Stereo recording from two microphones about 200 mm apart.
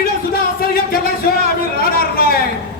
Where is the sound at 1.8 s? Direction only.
50° left (ahead or behind).